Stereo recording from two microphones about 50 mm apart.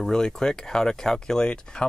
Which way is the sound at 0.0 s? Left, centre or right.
Centre.